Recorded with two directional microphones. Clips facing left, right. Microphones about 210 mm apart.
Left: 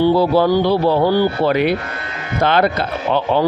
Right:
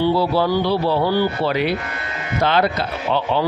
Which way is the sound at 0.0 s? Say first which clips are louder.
Left 4 dB; 50° left (ahead or behind).